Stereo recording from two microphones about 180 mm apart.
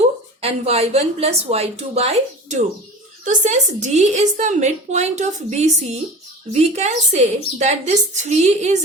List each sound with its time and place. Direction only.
0.4 s a woman's voice: 35° right (ahead or behind)